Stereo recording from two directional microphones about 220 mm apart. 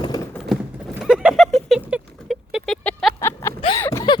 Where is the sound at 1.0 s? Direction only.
5° right (ahead or behind).